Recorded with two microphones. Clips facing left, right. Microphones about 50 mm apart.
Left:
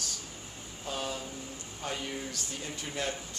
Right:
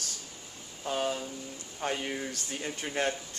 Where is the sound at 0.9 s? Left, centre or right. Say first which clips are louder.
Right 5 dB; right.